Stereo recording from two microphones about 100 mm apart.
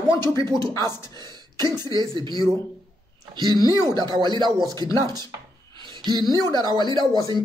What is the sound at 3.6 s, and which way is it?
Speech, 35° left (ahead or behind).